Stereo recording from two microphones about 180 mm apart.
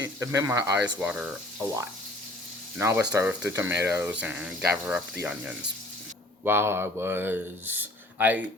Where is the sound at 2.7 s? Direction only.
10° right (ahead or behind).